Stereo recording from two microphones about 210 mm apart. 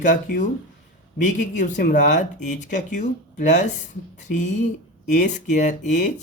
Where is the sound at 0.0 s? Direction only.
35° left (ahead or behind).